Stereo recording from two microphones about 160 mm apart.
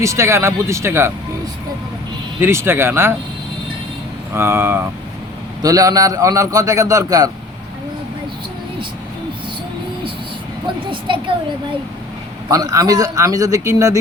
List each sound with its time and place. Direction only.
0.0 s speech: 15° right (ahead or behind)
2.4 s speech: 15° right (ahead or behind)
4.4 s a man's voice: 15° right (ahead or behind)
11.1 s a woman's voice: 30° right (ahead or behind)
12.5 s a man's voice: 20° right (ahead or behind)